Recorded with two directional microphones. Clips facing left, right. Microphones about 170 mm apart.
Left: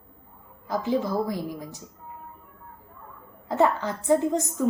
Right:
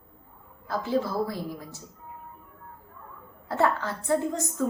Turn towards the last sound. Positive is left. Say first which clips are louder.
# left 4 dB
turn(degrees=15)  # may be behind; listen again after turning